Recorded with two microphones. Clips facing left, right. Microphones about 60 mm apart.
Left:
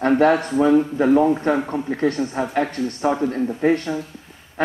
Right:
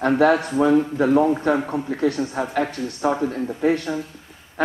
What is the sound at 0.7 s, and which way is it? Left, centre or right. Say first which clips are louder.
A man's voice: left 2 dB; centre.